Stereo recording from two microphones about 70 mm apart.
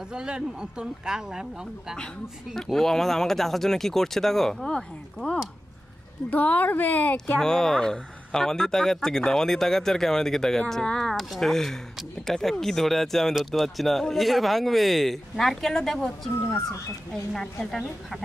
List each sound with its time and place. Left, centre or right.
0.1 s speech: centre
2.5 s speech: centre
6.3 s a woman's voice: left
7.3 s speech: centre